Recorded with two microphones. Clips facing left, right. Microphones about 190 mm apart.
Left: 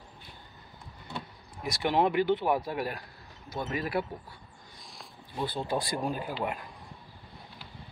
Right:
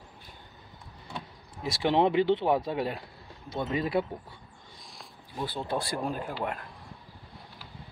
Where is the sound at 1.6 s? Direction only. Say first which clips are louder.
Right 2 dB; 25° right (ahead or behind).